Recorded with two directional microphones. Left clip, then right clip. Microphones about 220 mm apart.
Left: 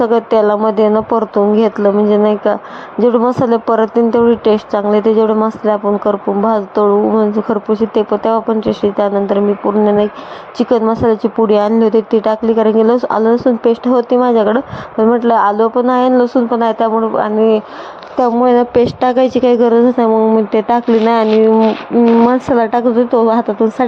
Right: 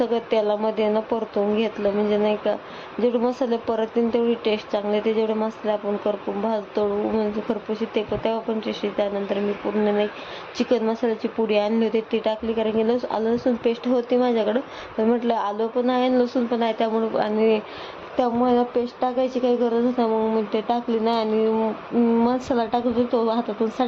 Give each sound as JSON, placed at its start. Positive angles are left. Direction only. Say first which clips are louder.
{"t": 0.0, "sound": "speech", "louder": "left 11 dB", "side_deg": 25}
{"t": 10.6, "sound": "speech", "louder": "left 10 dB", "side_deg": 25}
{"t": 18.2, "sound": "a woman's voice", "louder": "left 10 dB", "side_deg": 35}